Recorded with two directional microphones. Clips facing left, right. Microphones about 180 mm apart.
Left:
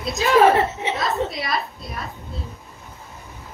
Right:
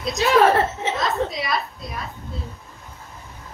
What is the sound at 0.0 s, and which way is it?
Chuckle, centre (ahead or behind).